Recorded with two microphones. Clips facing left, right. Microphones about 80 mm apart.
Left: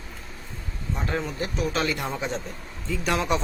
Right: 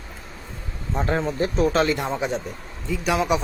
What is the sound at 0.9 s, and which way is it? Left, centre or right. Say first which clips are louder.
Speech: right 6 dB; right.